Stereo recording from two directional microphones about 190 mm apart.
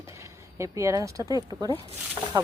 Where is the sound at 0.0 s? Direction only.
15° right (ahead or behind).